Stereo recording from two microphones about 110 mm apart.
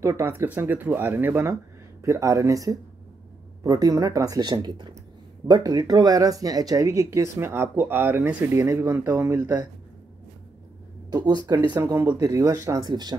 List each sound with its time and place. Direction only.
0.0 s speech: 20° right (ahead or behind)
8.6 s speech: 30° right (ahead or behind)
11.1 s speech: 40° right (ahead or behind)
12.8 s speech: 40° right (ahead or behind)